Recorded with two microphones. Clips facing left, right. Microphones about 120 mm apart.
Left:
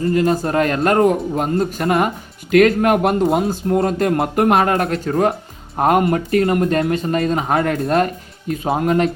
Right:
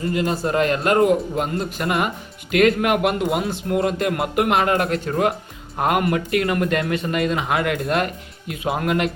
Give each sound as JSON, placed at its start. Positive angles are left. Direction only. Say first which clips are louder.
{"t": 0.0, "sound": "speech", "louder": "left 5 dB", "side_deg": 40}
{"t": 6.0, "sound": "speech", "louder": "left 4 dB", "side_deg": 30}